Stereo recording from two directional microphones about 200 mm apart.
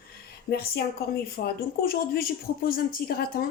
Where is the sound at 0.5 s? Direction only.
50° left (ahead or behind).